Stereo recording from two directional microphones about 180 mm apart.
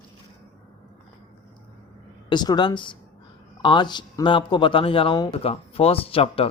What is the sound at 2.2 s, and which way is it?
A man's voice, 25° left (ahead or behind).